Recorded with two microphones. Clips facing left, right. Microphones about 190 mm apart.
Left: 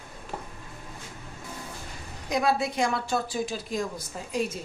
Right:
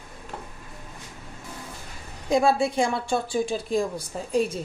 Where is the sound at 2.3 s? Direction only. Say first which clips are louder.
Right 5 dB; 30° right (ahead or behind).